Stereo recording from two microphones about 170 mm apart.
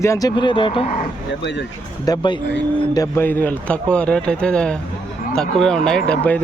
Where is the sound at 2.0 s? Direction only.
25° left (ahead or behind); by 6.4 s 10° left (ahead or behind).